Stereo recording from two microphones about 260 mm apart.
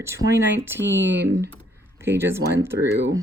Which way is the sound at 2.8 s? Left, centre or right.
Right.